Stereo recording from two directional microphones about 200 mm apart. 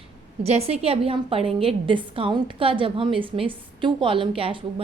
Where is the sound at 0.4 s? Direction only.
30° right (ahead or behind).